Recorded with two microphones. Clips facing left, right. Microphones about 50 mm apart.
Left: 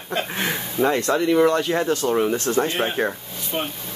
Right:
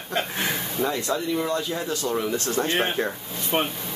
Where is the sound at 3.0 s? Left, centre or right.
Left.